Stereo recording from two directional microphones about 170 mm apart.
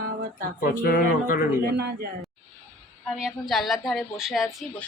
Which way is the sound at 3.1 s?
5° right (ahead or behind).